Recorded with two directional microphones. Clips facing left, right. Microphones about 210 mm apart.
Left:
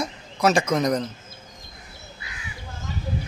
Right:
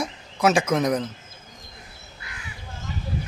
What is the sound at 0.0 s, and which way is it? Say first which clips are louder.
Speech: even; 5° right (ahead or behind).